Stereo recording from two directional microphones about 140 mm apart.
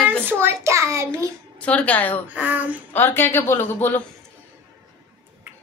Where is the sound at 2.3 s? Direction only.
10° right (ahead or behind).